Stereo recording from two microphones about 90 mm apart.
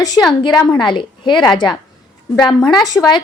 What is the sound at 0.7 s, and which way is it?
A woman's voice, 60° left (ahead or behind).